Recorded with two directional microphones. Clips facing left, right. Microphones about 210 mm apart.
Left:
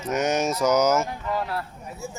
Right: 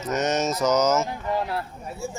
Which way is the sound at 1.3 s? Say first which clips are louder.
Right 1 dB; 25° right (ahead or behind).